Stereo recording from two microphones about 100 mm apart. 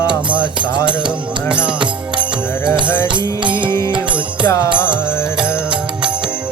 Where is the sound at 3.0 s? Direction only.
55° right (ahead or behind).